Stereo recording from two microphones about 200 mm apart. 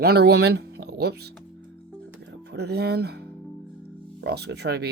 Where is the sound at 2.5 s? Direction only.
55° right (ahead or behind).